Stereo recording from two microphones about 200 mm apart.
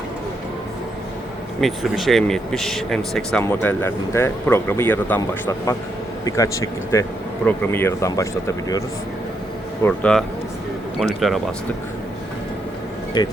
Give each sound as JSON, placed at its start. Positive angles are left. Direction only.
{"t": 1.6, "sound": "speech", "side_deg": 0}
{"t": 9.8, "sound": "speech", "side_deg": 5}
{"t": 13.2, "sound": "speech", "side_deg": 20}